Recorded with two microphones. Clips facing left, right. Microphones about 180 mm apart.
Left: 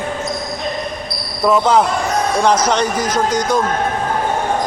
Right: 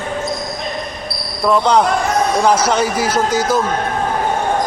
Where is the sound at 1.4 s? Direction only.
5° left (ahead or behind).